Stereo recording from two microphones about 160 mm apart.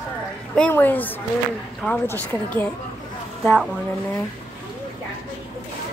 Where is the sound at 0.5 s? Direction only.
10° left (ahead or behind).